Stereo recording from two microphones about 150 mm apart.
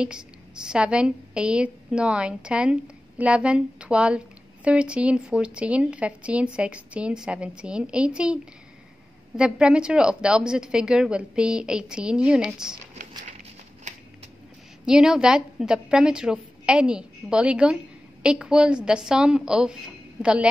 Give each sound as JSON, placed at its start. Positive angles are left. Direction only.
{"t": 0.0, "sound": "a woman's voice", "side_deg": -5}
{"t": 9.4, "sound": "a woman's voice", "side_deg": -5}
{"t": 13.9, "sound": "a sound", "side_deg": -50}
{"t": 14.9, "sound": "a woman's voice", "side_deg": -5}